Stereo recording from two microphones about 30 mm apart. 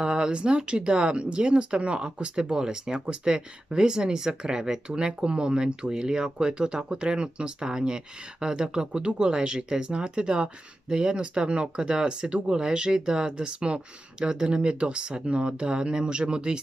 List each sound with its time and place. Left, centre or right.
0.0 s speech: right
4.9 s speech: right